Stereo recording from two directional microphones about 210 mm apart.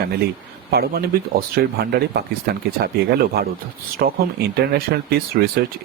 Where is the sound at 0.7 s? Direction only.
50° right (ahead or behind).